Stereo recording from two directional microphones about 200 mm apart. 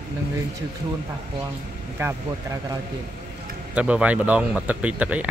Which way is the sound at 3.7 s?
5° right (ahead or behind).